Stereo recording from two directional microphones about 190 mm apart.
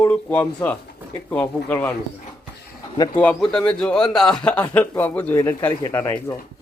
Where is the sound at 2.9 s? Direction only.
25° left (ahead or behind).